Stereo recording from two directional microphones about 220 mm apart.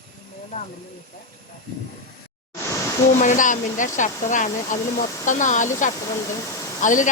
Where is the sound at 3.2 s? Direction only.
35° left (ahead or behind).